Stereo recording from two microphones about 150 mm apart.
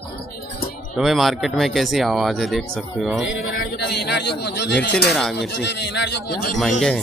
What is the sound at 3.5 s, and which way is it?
A man's voice, 90° left.